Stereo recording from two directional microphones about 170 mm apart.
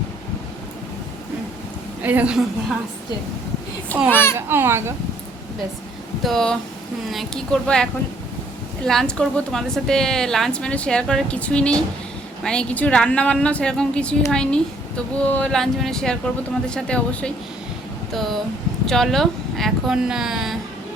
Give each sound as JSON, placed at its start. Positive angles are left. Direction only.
{"t": 2.0, "sound": "a woman's voice", "side_deg": -10}
{"t": 4.1, "sound": "a child's voice", "side_deg": 15}
{"t": 4.4, "sound": "a woman's voice", "side_deg": -15}
{"t": 6.2, "sound": "speech", "side_deg": 5}